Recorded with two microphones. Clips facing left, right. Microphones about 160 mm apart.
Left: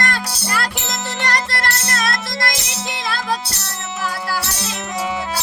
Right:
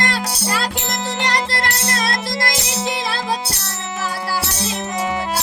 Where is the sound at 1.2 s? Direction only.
20° right (ahead or behind).